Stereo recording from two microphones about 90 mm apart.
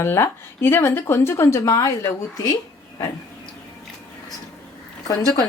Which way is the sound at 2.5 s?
40° left (ahead or behind).